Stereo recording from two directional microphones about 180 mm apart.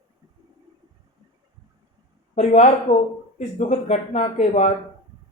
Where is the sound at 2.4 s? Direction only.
40° left (ahead or behind).